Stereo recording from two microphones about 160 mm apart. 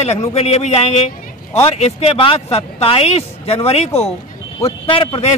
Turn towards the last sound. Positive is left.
turn(degrees=35)  # may be behind; listen again after turning